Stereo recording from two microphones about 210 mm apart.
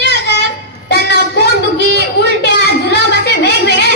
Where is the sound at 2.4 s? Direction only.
55° left (ahead or behind).